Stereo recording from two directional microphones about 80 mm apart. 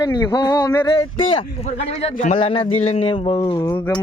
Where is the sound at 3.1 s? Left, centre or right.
Left.